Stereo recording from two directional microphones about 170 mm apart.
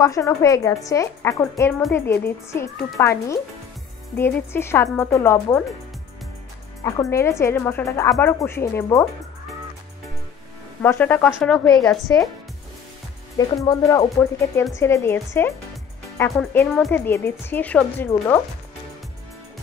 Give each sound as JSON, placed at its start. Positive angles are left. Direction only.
{"t": 0.0, "sound": "a woman's voice", "side_deg": 20}
{"t": 6.8, "sound": "a woman's voice", "side_deg": 20}
{"t": 10.8, "sound": "a woman's voice", "side_deg": 10}
{"t": 13.7, "sound": "a woman's voice", "side_deg": 20}